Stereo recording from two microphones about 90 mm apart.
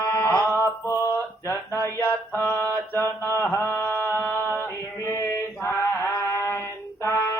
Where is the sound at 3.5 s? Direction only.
25° left (ahead or behind).